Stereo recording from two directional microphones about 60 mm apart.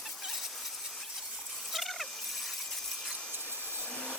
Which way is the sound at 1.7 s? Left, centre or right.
Centre.